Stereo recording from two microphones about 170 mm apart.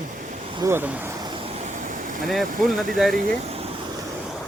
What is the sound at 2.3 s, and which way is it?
Speech, centre (ahead or behind).